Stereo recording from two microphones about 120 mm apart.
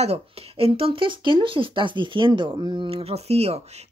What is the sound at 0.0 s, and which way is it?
Speech, 55° right (ahead or behind).